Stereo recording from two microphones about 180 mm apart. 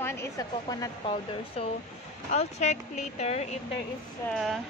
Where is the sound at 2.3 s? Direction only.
40° left (ahead or behind).